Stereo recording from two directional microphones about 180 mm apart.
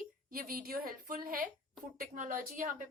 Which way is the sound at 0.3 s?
50° right (ahead or behind).